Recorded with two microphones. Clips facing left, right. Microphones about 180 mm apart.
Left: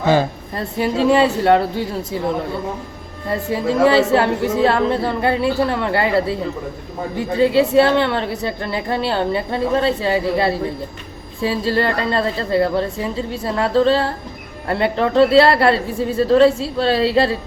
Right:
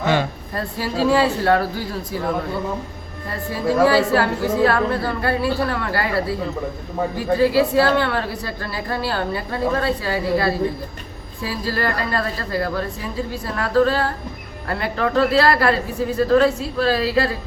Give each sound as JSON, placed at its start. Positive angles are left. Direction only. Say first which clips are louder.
{"t": 0.5, "sound": "a woman's voice", "louder": "left 4 dB", "side_deg": 25}
{"t": 3.2, "sound": "a woman's voice", "louder": "left 3 dB", "side_deg": 25}